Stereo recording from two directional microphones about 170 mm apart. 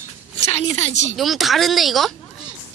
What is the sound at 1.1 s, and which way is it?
Speech, centre (ahead or behind).